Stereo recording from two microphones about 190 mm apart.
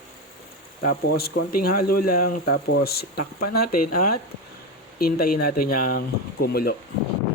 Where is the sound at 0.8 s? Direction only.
55° left (ahead or behind).